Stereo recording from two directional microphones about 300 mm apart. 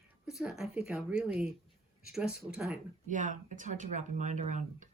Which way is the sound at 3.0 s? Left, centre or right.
Right.